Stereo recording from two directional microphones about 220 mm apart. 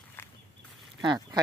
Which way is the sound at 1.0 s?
20° right (ahead or behind).